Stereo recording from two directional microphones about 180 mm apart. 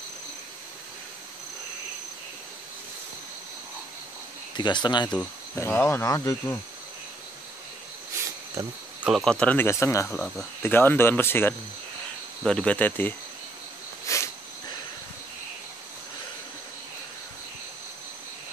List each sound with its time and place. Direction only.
4.6 s speech: 25° left (ahead or behind)
5.1 s speech: 10° left (ahead or behind)
9.0 s speech: centre (ahead or behind); by 10.0 s 15° left (ahead or behind)
10.0 s speech: 5° left (ahead or behind)
14.0 s a sound: 15° left (ahead or behind)